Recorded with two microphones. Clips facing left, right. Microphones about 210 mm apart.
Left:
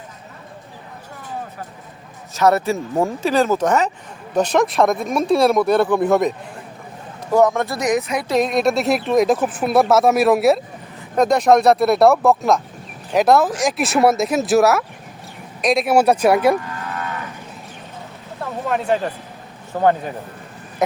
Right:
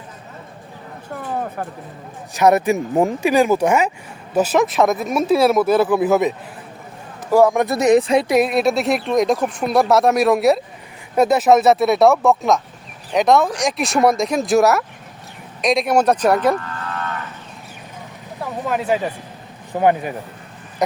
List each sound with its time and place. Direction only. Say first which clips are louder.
2.3 s speech: right 2 dB; 15° right (ahead or behind)
8.3 s speech: right 1 dB; 5° right (ahead or behind)
15.6 s moo: left 1 dB; 5° left (ahead or behind)
18.3 s speech: even; centre (ahead or behind)